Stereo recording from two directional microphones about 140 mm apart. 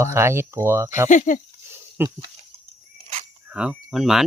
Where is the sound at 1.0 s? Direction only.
65° left (ahead or behind).